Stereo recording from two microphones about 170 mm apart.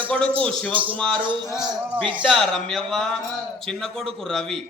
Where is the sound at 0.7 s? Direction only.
30° right (ahead or behind).